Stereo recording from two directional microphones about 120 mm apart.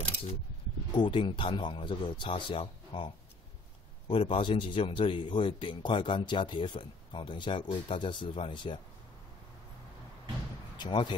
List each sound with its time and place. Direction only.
0.0 s mechanisms: 50° left (ahead or behind)
0.9 s speech: 45° left (ahead or behind)
4.1 s speech: 50° left (ahead or behind)
10.8 s speech: 40° left (ahead or behind)